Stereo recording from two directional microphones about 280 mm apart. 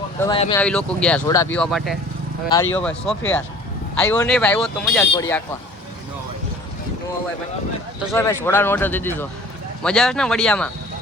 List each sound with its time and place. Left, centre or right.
0.2 s speech: centre
0.6 s speech: centre
8.1 s speech: centre